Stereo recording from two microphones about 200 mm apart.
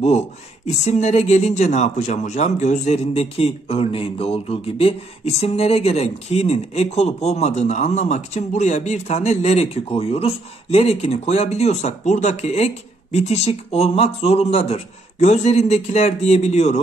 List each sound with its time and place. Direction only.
0.8 s speech: 35° left (ahead or behind)